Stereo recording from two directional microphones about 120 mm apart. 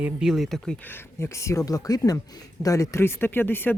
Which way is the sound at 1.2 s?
25° left (ahead or behind).